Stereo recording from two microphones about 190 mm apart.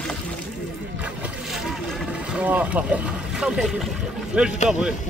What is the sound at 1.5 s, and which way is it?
Boat, centre (ahead or behind).